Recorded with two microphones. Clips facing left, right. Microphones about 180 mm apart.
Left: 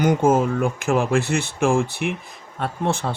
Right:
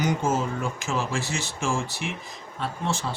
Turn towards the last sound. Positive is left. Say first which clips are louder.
# left 5 dB
turn(degrees=55)  # may be behind; listen again after turning